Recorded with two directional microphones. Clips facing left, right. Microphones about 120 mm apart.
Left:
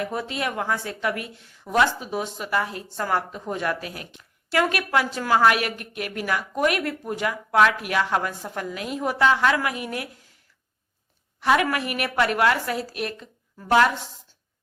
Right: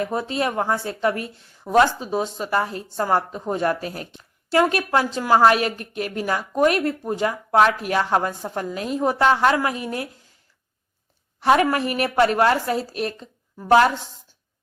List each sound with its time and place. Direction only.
0.0 s a woman's voice: 30° right (ahead or behind)
11.3 s a woman's voice: 35° right (ahead or behind)